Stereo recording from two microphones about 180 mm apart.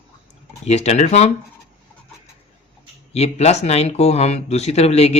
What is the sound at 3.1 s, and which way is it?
Speech, 35° left (ahead or behind).